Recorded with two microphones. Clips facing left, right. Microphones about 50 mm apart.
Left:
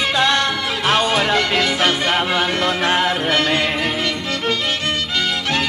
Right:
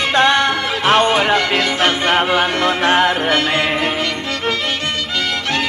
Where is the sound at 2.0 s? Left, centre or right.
Right.